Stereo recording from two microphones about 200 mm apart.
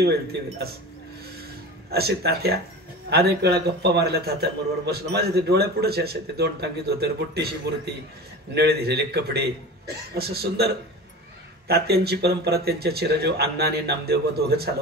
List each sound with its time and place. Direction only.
0.0 s a man's voice: 55° right (ahead or behind)
1.9 s a man's voice: 50° right (ahead or behind)